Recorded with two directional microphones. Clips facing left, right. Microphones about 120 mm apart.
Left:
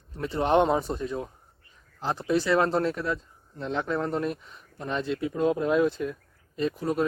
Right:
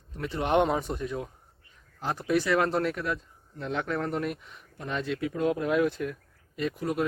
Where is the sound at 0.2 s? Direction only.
30° left (ahead or behind).